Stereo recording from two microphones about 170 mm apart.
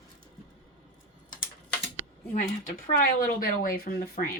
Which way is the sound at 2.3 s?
55° left (ahead or behind).